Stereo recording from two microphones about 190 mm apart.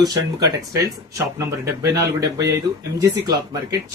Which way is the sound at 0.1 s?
20° right (ahead or behind).